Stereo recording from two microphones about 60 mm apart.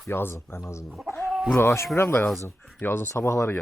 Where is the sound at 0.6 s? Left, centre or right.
Left.